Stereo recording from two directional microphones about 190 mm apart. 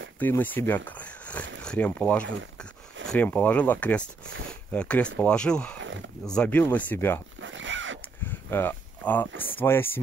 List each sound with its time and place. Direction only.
0.2 s speech: 10° left (ahead or behind)
5.8 s a sound: 80° right
6.2 s speech: 5° left (ahead or behind)
7.4 s zipper: 80° right
8.3 s a sound: 10° left (ahead or behind)
9.6 s speech: 10° left (ahead or behind)